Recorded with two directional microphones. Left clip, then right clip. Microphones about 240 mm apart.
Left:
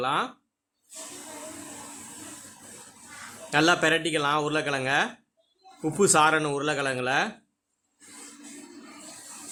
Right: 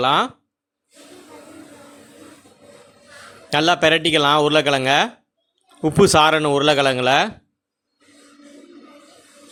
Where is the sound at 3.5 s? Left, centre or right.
Right.